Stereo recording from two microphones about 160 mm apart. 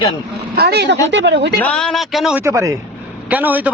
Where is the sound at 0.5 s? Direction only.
90° right.